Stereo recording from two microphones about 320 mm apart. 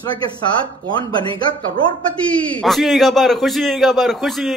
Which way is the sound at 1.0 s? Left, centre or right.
Centre.